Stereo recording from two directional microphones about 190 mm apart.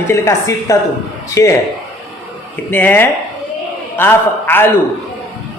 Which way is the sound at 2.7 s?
10° left (ahead or behind).